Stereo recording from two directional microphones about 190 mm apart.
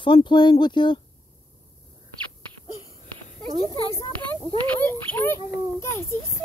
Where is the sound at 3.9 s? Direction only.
25° left (ahead or behind).